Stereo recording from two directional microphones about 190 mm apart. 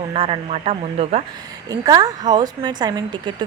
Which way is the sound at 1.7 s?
20° right (ahead or behind).